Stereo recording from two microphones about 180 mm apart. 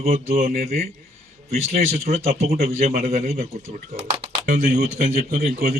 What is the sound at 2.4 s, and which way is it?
Speech, 55° right (ahead or behind).